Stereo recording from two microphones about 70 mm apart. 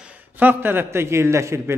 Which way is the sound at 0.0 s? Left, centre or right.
Right.